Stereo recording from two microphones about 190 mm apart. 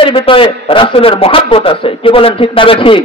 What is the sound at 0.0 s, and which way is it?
A man's voice, 30° left (ahead or behind).